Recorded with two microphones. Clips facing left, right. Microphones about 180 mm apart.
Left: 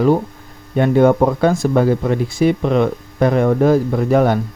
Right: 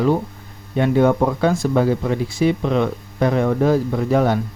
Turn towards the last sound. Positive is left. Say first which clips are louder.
# left 3 dB
turn(degrees=55)  # may be behind; listen again after turning